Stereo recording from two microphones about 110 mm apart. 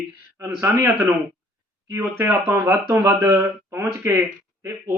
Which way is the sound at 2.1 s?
20° right (ahead or behind).